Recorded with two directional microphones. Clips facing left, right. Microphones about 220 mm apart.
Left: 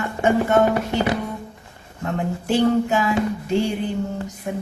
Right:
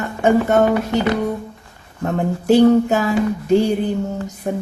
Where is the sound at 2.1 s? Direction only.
40° right (ahead or behind).